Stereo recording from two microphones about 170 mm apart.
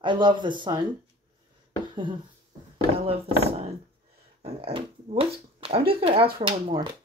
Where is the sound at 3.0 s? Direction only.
35° right (ahead or behind).